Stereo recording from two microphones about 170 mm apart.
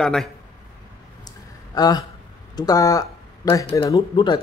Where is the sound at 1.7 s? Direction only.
25° left (ahead or behind).